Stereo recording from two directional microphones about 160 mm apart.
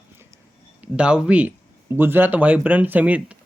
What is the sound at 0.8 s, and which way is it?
Speech, 5° right (ahead or behind).